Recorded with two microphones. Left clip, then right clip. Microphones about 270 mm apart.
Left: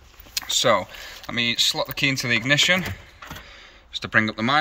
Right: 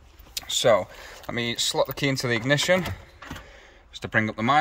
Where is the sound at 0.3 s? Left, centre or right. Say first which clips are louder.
Left 1 dB; centre.